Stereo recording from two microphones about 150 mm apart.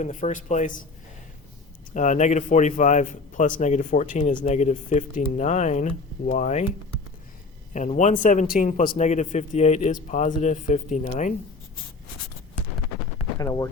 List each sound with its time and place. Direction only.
0.0 s a man's voice: 55° left (ahead or behind)
1.9 s a man's voice: 55° left (ahead or behind)
7.7 s a man's voice: 55° left (ahead or behind)
13.4 s speech: 20° left (ahead or behind)